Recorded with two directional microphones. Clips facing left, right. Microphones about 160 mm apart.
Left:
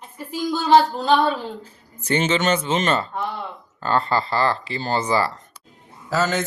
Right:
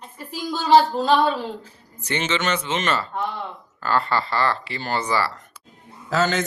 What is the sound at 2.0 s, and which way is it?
Speech, 35° left (ahead or behind).